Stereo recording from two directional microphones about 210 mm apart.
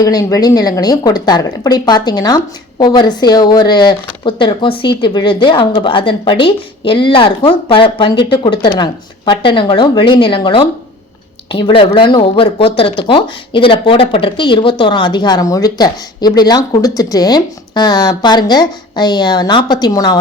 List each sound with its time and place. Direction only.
0.0 s speech: 15° left (ahead or behind)